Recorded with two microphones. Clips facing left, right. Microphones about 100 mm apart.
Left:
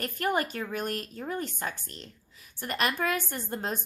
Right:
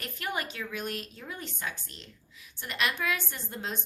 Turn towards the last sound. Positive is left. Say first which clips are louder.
# left 4 dB
turn(degrees=45)  # may be behind; listen again after turning